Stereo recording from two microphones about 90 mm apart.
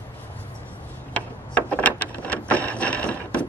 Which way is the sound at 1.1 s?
15° left (ahead or behind).